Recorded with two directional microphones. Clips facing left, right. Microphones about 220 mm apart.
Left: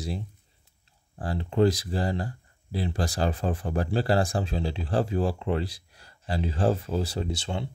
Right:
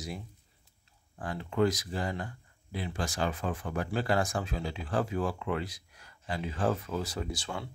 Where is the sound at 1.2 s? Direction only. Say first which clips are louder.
Left 5 dB; 30° left (ahead or behind).